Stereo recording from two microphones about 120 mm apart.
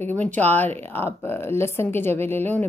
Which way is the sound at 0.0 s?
15° left (ahead or behind).